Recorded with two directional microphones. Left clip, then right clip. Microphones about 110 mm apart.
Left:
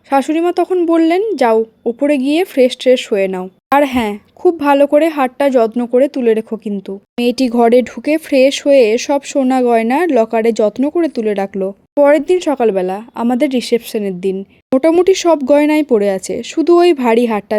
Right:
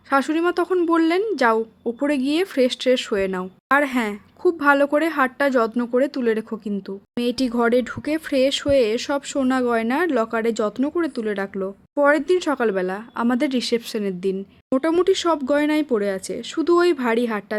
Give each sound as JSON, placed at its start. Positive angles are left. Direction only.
{"t": 0.1, "sound": "a woman's voice", "side_deg": 35}
{"t": 3.7, "sound": "speech", "side_deg": 50}
{"t": 14.8, "sound": "speech", "side_deg": 50}